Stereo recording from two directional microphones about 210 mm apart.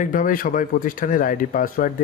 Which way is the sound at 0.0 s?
40° left (ahead or behind).